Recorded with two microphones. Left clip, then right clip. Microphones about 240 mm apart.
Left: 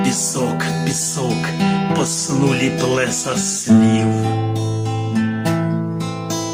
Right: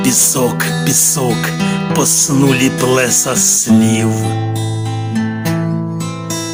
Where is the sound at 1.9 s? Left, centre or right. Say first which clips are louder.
Right 6 dB; right.